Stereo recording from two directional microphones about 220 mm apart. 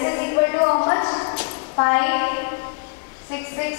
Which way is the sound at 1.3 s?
15° left (ahead or behind).